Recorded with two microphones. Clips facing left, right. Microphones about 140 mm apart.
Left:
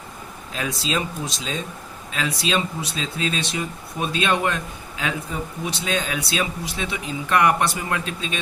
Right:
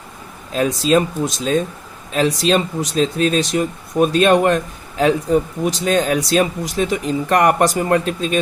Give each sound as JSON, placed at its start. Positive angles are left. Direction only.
{"t": 0.5, "sound": "speech", "side_deg": -45}